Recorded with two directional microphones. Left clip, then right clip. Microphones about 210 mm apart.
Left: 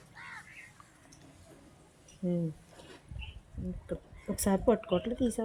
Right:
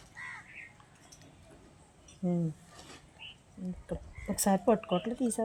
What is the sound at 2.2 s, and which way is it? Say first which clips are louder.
Speech: even; 40° right (ahead or behind).